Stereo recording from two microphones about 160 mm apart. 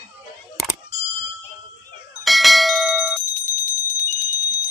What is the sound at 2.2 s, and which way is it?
Bell, centre (ahead or behind).